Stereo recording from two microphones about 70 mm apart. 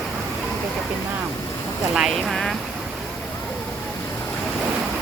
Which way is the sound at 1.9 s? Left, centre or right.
Centre.